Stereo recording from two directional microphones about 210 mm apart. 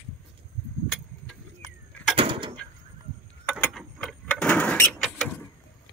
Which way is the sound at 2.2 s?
25° right (ahead or behind).